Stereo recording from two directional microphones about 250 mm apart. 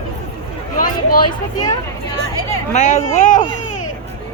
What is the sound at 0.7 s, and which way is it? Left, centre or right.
Speech, left.